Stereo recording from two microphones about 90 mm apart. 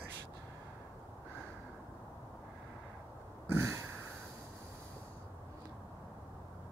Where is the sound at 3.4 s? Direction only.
30° right (ahead or behind).